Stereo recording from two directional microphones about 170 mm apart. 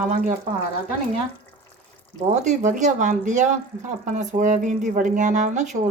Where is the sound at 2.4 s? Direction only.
45° right (ahead or behind).